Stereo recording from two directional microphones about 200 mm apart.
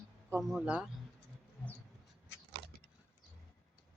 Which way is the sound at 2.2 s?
55° left (ahead or behind).